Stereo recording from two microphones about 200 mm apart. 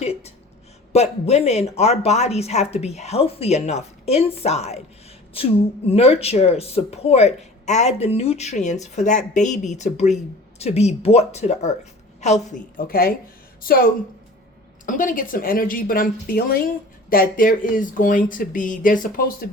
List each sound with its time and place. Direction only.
0.0 s a sound: 30° left (ahead or behind)
0.9 s speech: 35° left (ahead or behind)
5.9 s speech: 30° left (ahead or behind)
12.9 s speech: 50° left (ahead or behind)